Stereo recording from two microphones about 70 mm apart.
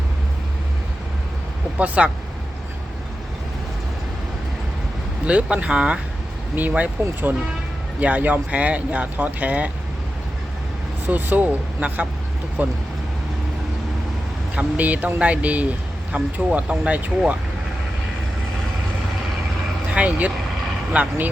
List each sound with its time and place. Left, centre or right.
2.0 s speech: centre
5.2 s speech: centre
11.0 s speech: right
14.5 s speech: right
19.9 s speech: right